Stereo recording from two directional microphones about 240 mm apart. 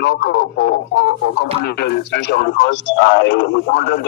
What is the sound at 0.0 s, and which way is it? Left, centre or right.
Speech, left.